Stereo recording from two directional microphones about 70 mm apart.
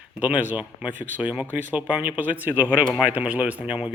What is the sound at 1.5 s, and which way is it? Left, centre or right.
Speech, right.